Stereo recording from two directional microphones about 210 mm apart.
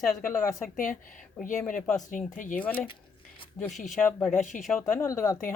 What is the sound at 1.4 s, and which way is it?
Speech, 40° left (ahead or behind).